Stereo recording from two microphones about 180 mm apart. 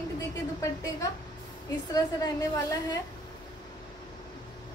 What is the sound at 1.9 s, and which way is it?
A woman's voice, 20° left (ahead or behind).